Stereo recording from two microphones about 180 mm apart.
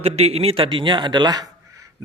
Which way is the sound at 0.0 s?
35° right (ahead or behind).